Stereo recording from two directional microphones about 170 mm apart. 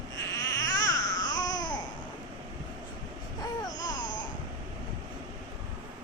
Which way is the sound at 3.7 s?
25° left (ahead or behind).